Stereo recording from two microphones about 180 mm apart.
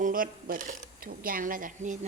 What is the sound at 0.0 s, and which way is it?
Speech, 50° right (ahead or behind).